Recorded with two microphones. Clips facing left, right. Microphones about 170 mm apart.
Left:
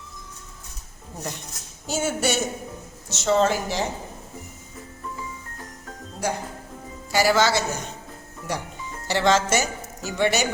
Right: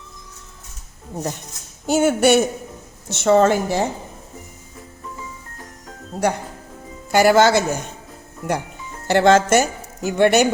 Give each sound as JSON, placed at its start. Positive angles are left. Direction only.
{"t": 1.9, "sound": "a woman's voice", "side_deg": -60}
{"t": 6.2, "sound": "a woman's voice", "side_deg": -65}